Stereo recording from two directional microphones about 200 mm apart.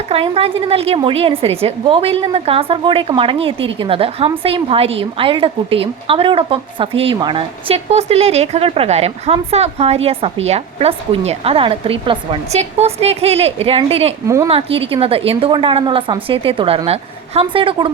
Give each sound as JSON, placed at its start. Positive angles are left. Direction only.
{"t": 0.1, "sound": "a woman's voice", "side_deg": -30}
{"t": 14.3, "sound": "speech", "side_deg": -15}
{"t": 14.5, "sound": "a woman's voice", "side_deg": -30}